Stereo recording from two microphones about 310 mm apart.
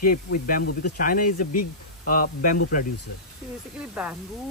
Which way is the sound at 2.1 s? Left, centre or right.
Left.